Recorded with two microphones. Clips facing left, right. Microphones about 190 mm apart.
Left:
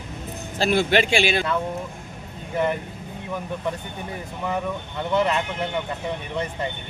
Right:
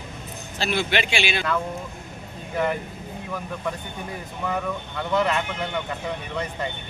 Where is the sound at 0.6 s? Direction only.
45° left (ahead or behind).